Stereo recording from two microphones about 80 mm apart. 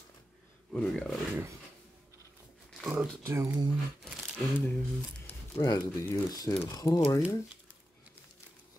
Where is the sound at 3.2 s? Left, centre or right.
Right.